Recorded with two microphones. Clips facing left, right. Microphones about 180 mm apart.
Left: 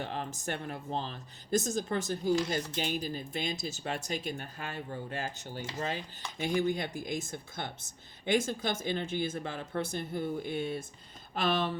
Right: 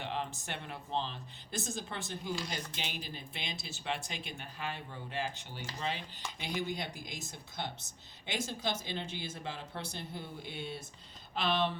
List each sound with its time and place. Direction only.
0.0 s speech: 45° left (ahead or behind)